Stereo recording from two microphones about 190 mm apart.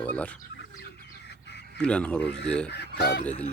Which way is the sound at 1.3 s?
60° left (ahead or behind).